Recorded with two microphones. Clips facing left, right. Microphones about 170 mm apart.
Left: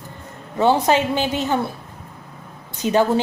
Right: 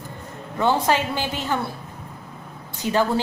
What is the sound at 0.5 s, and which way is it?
A woman's voice, 20° left (ahead or behind).